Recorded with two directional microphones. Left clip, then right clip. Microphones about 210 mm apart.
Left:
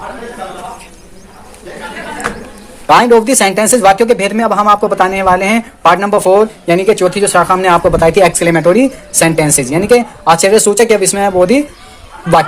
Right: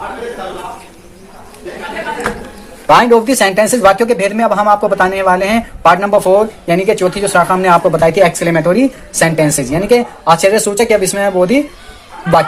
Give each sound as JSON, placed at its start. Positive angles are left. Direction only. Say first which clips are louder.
{"t": 2.8, "sound": "speech", "louder": "left 1 dB", "side_deg": 35}